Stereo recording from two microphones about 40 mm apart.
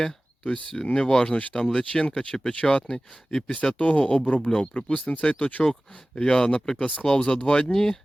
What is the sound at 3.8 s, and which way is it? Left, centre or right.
Speech, left.